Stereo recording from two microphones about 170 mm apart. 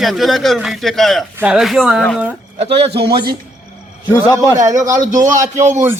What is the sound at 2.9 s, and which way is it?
Speech, 70° right (ahead or behind).